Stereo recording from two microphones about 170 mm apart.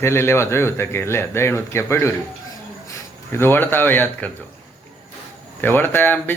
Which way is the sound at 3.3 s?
15° left (ahead or behind).